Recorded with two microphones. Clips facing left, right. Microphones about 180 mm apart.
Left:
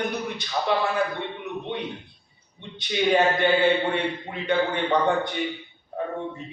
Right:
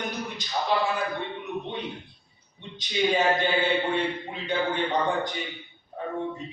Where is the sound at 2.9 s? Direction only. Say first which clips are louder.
Left 2 dB; 65° left (ahead or behind).